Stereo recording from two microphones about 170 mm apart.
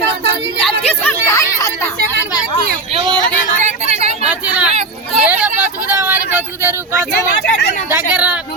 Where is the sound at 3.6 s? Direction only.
40° right (ahead or behind).